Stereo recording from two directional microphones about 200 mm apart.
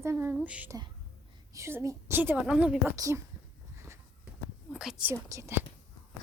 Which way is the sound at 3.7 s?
15° right (ahead or behind).